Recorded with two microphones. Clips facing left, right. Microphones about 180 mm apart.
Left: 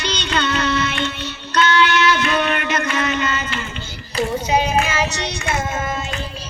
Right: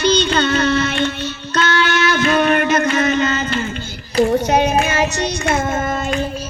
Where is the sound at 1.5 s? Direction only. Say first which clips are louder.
Left 1 dB; 45° right (ahead or behind).